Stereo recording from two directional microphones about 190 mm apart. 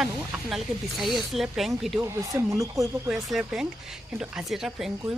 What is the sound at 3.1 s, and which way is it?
Speech, centre (ahead or behind).